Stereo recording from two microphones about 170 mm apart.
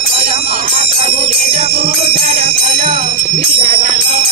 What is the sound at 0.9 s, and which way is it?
Speech, 35° right (ahead or behind).